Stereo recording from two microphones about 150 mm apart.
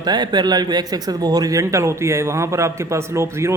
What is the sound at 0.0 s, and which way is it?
A man's voice, 30° right (ahead or behind).